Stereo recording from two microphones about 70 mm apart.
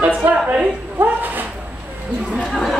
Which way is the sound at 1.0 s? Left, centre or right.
Right.